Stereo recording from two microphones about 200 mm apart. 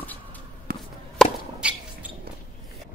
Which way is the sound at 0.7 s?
45° right (ahead or behind).